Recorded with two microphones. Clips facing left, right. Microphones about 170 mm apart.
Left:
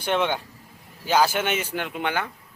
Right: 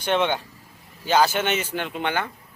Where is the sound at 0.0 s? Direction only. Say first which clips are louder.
Right 1 dB; 5° left (ahead or behind).